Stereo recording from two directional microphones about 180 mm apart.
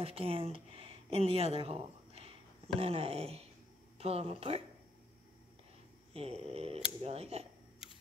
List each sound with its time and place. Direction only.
0.0 s speech: 30° right (ahead or behind)
6.1 s speech: 35° right (ahead or behind)
7.8 s camera: centre (ahead or behind)